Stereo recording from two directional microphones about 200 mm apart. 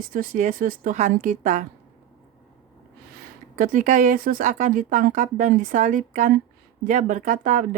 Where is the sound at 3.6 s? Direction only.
40° right (ahead or behind).